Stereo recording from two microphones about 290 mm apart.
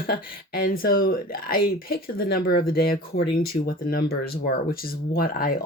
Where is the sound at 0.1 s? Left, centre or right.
Left.